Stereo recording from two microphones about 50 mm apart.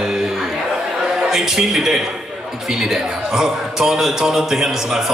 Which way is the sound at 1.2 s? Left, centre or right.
Centre.